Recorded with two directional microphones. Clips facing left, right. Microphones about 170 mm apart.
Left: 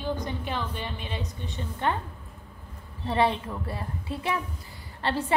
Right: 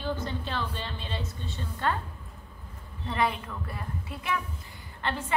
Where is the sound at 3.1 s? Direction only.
30° left (ahead or behind).